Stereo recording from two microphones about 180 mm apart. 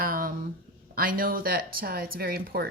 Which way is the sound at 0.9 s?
50° right (ahead or behind).